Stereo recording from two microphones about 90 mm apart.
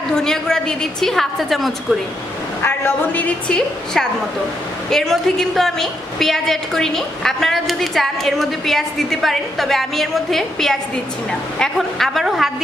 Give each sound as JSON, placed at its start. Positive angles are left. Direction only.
{"t": 0.1, "sound": "a woman's voice", "side_deg": 5}
{"t": 2.6, "sound": "a woman's voice", "side_deg": 20}